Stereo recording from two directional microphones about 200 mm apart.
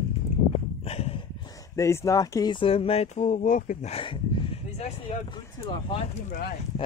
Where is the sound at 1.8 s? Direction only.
15° left (ahead or behind).